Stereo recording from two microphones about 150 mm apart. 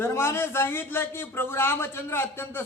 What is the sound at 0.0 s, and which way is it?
A man's voice, 15° left (ahead or behind).